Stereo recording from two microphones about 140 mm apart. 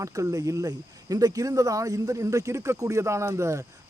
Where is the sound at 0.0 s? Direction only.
20° right (ahead or behind).